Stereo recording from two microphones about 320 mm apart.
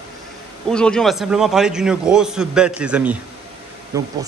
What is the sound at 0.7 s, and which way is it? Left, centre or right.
Speech, centre.